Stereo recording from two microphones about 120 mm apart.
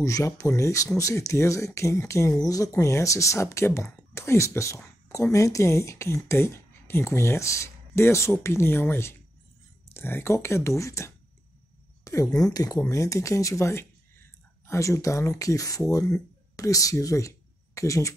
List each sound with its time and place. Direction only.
0.0 s speech: 25° left (ahead or behind)
12.0 s a sound: 25° left (ahead or behind)
12.4 s speech: 30° left (ahead or behind)